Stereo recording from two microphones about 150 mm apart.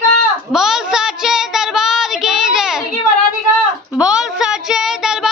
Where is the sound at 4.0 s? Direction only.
5° right (ahead or behind).